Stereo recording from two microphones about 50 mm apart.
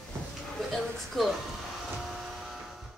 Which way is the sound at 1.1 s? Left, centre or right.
Centre.